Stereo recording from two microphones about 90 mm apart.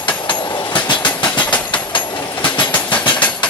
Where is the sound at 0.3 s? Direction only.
55° left (ahead or behind).